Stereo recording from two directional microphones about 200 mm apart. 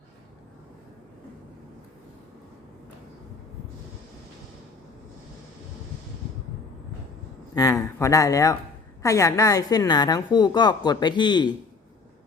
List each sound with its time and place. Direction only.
7.5 s a woman's voice: 20° left (ahead or behind)